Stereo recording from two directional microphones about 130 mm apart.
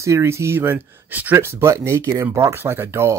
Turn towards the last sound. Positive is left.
turn(degrees=-20)  # may be behind; listen again after turning